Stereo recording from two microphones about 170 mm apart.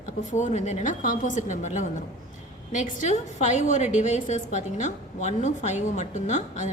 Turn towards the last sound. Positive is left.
turn(degrees=45)  # may be behind; listen again after turning